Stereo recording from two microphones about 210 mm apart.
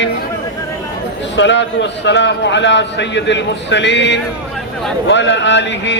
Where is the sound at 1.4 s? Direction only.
60° left (ahead or behind).